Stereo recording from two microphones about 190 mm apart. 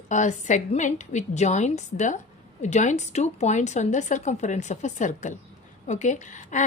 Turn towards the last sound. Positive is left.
turn(degrees=40)  # may be behind; listen again after turning